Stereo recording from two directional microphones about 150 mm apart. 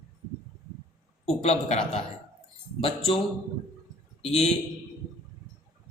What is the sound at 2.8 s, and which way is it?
Speech, 45° left (ahead or behind).